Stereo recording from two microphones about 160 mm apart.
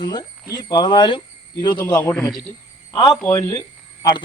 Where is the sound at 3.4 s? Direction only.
20° left (ahead or behind).